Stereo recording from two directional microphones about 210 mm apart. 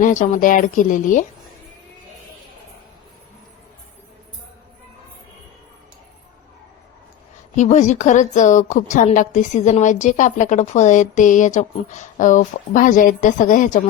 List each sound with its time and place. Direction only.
0.0 s a woman's voice: 35° left (ahead or behind)
7.5 s a woman's voice: 35° left (ahead or behind)